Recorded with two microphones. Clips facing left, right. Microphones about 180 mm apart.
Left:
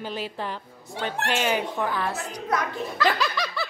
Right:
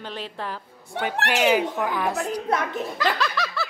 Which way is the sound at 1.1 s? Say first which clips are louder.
Right 5 dB; 70° right (ahead or behind).